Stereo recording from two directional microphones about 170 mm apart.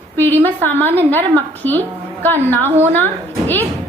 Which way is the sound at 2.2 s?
10° left (ahead or behind).